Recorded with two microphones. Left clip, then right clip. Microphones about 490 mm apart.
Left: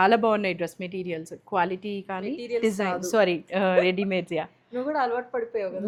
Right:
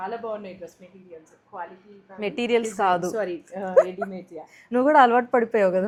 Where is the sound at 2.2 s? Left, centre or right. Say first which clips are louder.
Right 5 dB; right.